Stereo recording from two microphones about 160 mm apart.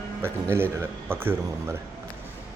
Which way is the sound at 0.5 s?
15° right (ahead or behind).